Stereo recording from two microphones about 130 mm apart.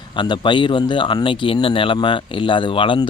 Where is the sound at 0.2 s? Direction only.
35° left (ahead or behind).